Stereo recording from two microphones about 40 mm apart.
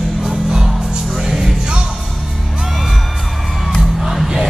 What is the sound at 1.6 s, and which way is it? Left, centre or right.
Music, centre.